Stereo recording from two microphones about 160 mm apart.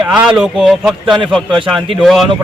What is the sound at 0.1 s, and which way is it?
Speech, centre (ahead or behind).